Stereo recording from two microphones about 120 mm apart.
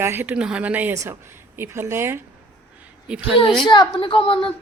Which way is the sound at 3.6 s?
40° left (ahead or behind).